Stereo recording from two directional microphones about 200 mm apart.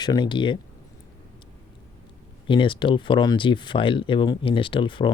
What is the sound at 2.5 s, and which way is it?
Speech, 25° left (ahead or behind).